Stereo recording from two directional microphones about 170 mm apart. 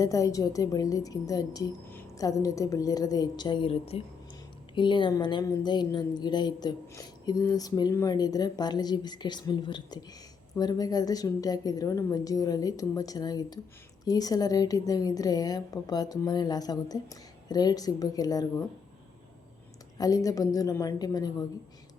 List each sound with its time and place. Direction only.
0.0 s a woman's voice: 20° left (ahead or behind)
20.0 s a woman's voice: 20° left (ahead or behind)